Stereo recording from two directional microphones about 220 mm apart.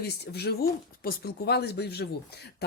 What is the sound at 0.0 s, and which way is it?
Speech, 50° left (ahead or behind).